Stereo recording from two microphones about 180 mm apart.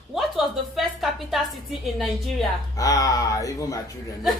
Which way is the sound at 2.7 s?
20° left (ahead or behind).